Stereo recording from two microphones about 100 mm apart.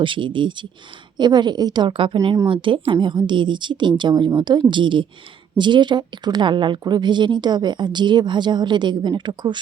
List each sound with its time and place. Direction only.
0.0 s a woman's voice: 55° right (ahead or behind)